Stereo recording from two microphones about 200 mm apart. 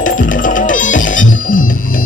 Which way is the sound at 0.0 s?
40° left (ahead or behind).